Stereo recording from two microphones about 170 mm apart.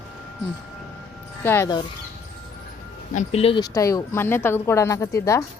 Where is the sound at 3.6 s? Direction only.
20° left (ahead or behind).